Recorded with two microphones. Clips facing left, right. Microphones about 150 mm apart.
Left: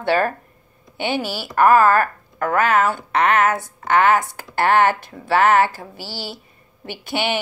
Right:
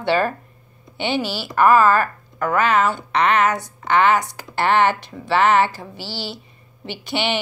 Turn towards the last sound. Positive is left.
turn(degrees=45)  # may be behind; listen again after turning